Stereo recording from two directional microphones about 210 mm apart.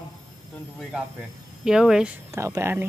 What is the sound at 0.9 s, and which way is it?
Speech, 5° right (ahead or behind).